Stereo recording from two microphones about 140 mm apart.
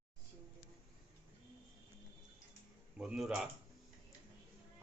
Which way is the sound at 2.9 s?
5° right (ahead or behind).